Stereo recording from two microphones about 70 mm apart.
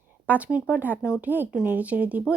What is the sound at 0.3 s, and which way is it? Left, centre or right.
Speech, right.